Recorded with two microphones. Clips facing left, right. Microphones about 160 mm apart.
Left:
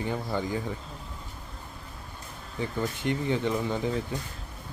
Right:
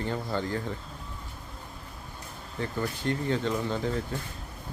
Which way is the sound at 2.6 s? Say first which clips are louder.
Left 1 dB; 15° left (ahead or behind).